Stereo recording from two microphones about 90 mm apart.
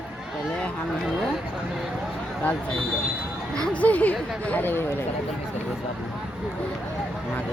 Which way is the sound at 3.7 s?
15° left (ahead or behind).